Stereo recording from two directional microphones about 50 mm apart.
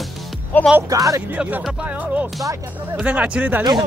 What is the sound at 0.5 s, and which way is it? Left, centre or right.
Speech, left.